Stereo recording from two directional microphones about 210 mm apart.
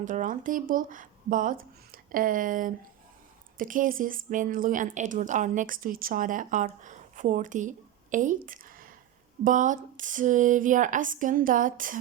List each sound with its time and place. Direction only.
0.0 s a woman's voice: 35° right (ahead or behind)